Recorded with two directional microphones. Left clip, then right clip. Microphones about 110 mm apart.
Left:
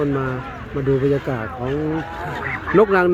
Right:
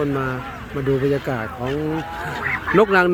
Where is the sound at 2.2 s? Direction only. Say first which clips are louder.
Right 2 dB; centre (ahead or behind).